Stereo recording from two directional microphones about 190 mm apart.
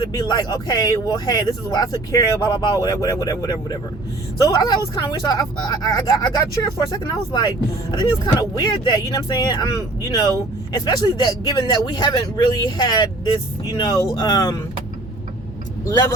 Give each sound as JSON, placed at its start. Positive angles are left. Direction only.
{"t": 0.0, "sound": "speech", "side_deg": 20}
{"t": 15.9, "sound": "speech", "side_deg": 20}